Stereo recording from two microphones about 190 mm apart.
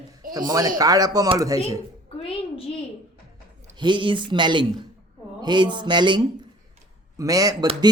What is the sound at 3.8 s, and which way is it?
A man's voice, 25° right (ahead or behind).